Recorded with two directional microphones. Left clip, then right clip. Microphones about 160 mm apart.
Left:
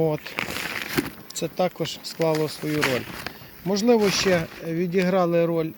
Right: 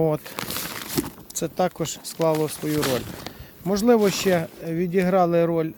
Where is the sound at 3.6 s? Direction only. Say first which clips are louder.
Right 1 dB; 20° right (ahead or behind).